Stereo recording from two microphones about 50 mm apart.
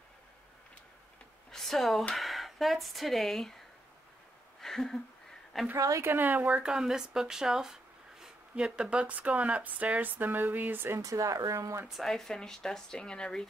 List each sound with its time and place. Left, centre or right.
1.5 s speech: centre
4.6 s a sound: centre
5.5 s speech: centre
6.0 s speech: right
6.6 s speech: centre; by 11.0 s right
11.0 s speech: right
12.0 s speech: centre